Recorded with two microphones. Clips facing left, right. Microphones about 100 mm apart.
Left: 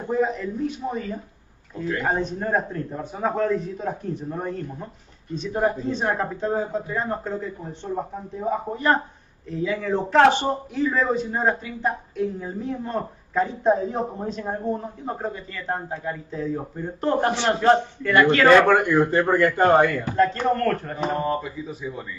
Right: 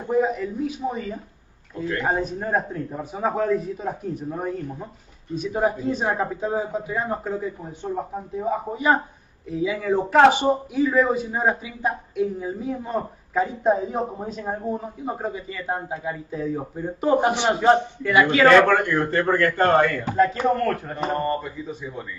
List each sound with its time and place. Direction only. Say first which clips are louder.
0.1 s a man's voice: right 2 dB; 5° right (ahead or behind)
18.5 s speech: left 1 dB; 15° left (ahead or behind)
20.2 s a man's voice: right 1 dB; 5° right (ahead or behind)